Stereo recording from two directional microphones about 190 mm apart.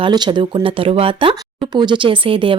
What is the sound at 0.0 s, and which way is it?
Speech, 25° right (ahead or behind).